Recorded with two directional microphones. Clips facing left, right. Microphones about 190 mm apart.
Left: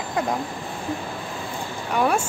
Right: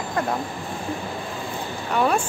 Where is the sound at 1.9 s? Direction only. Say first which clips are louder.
Even; 10° left (ahead or behind).